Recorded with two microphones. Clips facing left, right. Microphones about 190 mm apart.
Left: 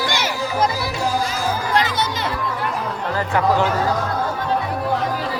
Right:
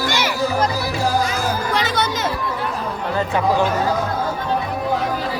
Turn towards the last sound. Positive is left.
turn(degrees=-15)  # may be behind; listen again after turning